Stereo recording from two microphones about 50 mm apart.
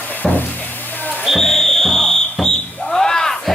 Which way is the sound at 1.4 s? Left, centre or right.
Centre.